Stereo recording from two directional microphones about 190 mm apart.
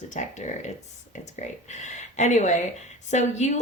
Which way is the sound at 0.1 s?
40° left (ahead or behind).